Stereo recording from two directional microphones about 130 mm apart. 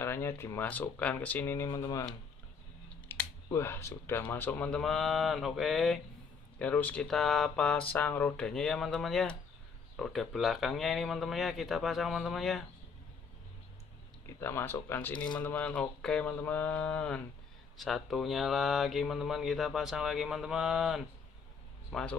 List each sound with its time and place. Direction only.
0.0 s speech: 20° left (ahead or behind)
3.1 s speech: 20° left (ahead or behind); by 5.9 s centre (ahead or behind)
6.6 s speech: 10° left (ahead or behind)
14.2 s speech: 20° left (ahead or behind); by 22.1 s centre (ahead or behind)